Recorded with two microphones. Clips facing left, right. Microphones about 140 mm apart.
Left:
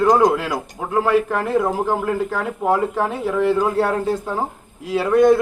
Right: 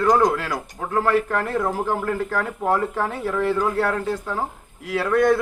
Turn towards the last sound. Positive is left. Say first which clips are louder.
# left 4 dB
turn(degrees=20)  # may be behind; listen again after turning